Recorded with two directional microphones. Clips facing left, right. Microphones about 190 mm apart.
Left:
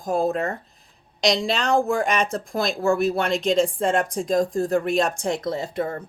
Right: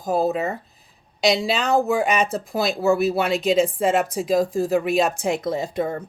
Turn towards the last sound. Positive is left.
turn(degrees=-15)  # may be behind; listen again after turning